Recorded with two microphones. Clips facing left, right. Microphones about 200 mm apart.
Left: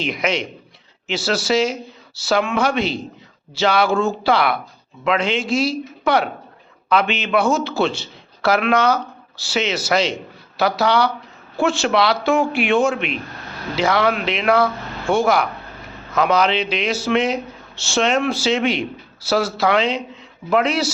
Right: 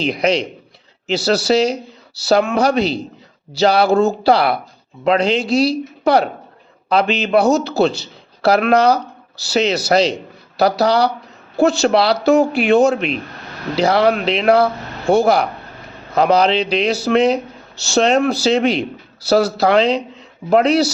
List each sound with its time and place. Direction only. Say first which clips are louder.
0.0 s speech: right 5 dB; 35° right (ahead or behind)